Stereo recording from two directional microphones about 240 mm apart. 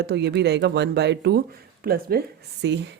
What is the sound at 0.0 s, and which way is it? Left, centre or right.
Speech, right.